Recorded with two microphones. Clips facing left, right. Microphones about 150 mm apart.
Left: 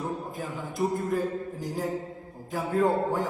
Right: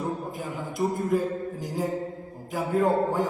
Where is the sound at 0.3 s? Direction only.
15° right (ahead or behind).